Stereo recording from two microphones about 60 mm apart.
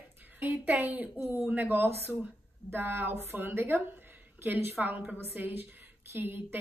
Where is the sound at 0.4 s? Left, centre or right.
Right.